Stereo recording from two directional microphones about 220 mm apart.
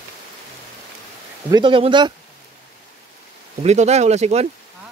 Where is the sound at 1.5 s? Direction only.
25° right (ahead or behind).